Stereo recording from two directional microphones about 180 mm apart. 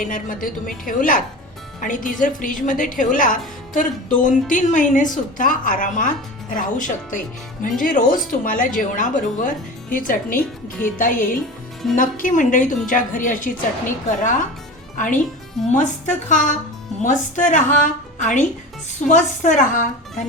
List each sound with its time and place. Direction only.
0.0 s a woman's voice: 50° left (ahead or behind)
15.7 s a woman's voice: 45° left (ahead or behind)